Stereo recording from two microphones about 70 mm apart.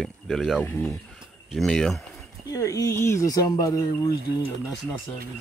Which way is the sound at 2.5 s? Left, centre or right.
Left.